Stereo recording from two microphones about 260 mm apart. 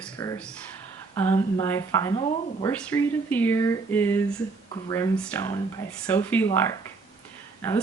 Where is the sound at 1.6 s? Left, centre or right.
Centre.